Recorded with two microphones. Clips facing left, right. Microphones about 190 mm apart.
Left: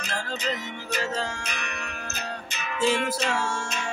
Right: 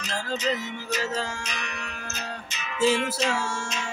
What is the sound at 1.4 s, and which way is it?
Music, 60° left (ahead or behind).